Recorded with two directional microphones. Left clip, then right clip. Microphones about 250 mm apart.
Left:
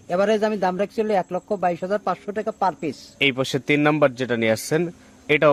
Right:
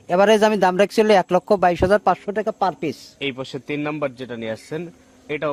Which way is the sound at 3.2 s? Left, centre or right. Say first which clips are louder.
Left 6 dB; centre.